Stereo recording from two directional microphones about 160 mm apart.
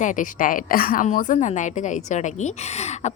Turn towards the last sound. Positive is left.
turn(degrees=45)  # may be behind; listen again after turning